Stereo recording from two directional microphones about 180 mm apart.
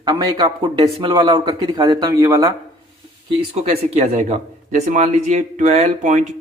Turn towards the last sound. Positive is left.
turn(degrees=-40)  # may be behind; listen again after turning